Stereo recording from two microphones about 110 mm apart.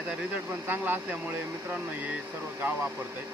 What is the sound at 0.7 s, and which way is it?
Speech, 20° right (ahead or behind).